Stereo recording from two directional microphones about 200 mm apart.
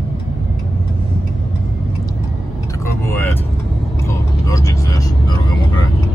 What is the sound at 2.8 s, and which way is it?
Vehicle, 10° left (ahead or behind).